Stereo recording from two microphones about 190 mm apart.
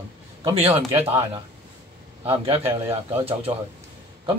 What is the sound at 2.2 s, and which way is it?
A man's voice, 30° right (ahead or behind).